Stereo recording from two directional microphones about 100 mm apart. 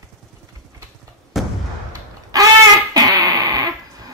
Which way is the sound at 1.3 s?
Centre (ahead or behind).